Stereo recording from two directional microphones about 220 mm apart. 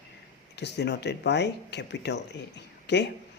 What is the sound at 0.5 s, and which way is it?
Speech, 50° left (ahead or behind).